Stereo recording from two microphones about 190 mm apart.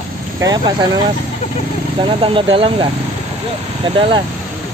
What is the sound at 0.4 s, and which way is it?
Speech, 20° right (ahead or behind).